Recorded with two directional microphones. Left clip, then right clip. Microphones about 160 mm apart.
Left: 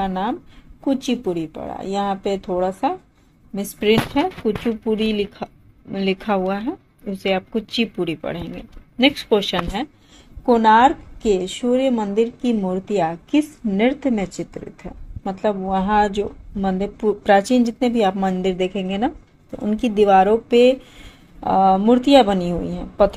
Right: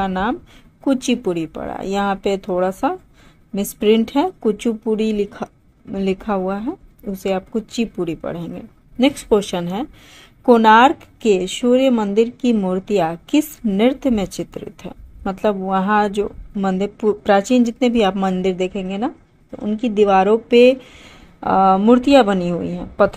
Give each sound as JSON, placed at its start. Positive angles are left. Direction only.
{"t": 0.0, "sound": "a woman's voice", "side_deg": -20}
{"t": 18.7, "sound": "a woman's voice", "side_deg": 0}